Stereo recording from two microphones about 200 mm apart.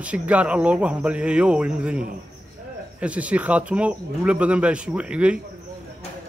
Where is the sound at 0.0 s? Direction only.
5° right (ahead or behind).